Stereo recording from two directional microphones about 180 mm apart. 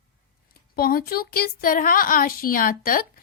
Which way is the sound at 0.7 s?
55° left (ahead or behind).